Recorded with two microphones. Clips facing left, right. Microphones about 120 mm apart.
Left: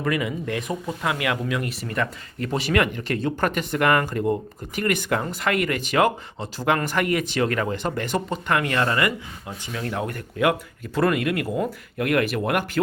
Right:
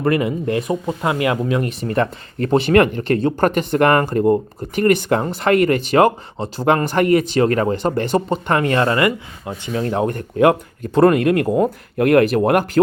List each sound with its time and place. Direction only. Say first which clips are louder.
0.0 s speech: right 7 dB; 40° right (ahead or behind)
0.5 s speech: right 7 dB; 30° right (ahead or behind)
3.2 s speech: right 6 dB; 50° right (ahead or behind)